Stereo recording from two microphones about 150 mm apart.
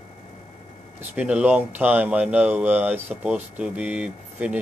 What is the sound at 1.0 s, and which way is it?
Speech, 10° right (ahead or behind).